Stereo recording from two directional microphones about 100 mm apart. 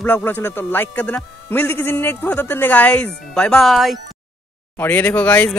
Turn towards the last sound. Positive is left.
turn(degrees=15)  # may be behind; listen again after turning